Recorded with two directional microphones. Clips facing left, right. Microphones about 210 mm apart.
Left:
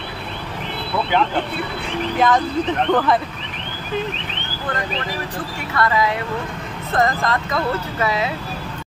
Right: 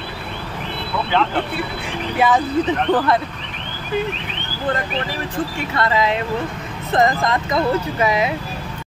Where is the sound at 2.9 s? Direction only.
Centre (ahead or behind).